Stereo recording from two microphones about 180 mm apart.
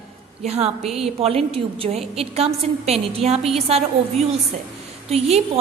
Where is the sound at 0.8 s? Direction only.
Centre (ahead or behind).